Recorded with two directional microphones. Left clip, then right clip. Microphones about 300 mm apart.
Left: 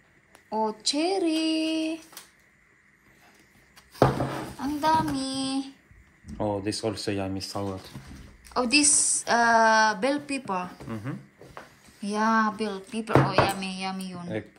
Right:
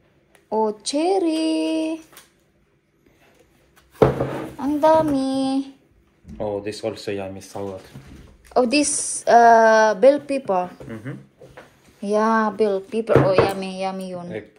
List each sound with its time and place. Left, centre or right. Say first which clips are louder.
0.5 s speech: right 5 dB; centre
4.6 s speech: right 8 dB; centre
6.6 s speech: right 2 dB; left
8.5 s speech: right 4 dB; centre
12.0 s speech: right 5 dB; centre